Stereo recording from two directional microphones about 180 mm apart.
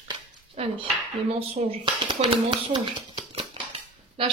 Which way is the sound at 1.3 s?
35° right (ahead or behind).